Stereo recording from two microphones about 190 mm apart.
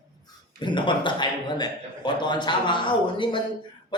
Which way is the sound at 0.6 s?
25° left (ahead or behind).